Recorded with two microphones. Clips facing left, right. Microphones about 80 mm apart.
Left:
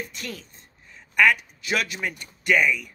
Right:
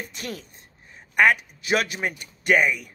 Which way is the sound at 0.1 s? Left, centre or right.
Right.